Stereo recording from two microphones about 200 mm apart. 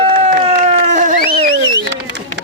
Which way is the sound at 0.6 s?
35° right (ahead or behind).